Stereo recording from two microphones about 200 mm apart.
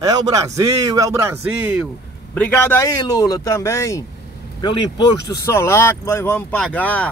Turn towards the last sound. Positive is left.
turn(degrees=5)  # may be behind; listen again after turning